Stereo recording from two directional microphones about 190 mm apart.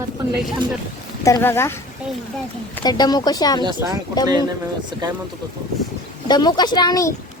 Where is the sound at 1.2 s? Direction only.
15° left (ahead or behind).